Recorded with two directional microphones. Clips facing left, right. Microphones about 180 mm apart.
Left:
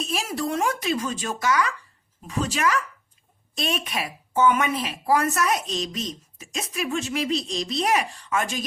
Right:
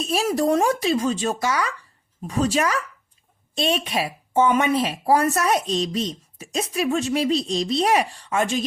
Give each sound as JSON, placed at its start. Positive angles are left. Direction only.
{"t": 0.0, "sound": "a woman's voice", "side_deg": -35}